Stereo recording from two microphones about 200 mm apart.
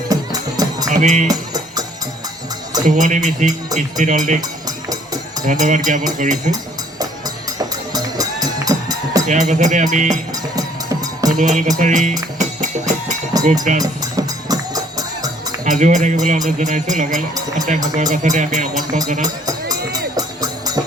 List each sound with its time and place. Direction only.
0.1 s music: 20° right (ahead or behind)
0.9 s speech: 40° right (ahead or behind)
1.3 s music: 20° right (ahead or behind)
2.8 s speech: 40° right (ahead or behind)
4.9 s music: 20° right (ahead or behind)
5.5 s speech: 40° right (ahead or behind)
7.9 s music: 20° right (ahead or behind)
9.2 s speech: 40° right (ahead or behind)
10.3 s music: 20° right (ahead or behind)
11.3 s speech: 40° right (ahead or behind)
11.8 s music: 35° right (ahead or behind)
13.8 s music: 20° right (ahead or behind)
15.6 s speech: 40° right (ahead or behind)
19.5 s music: 20° right (ahead or behind)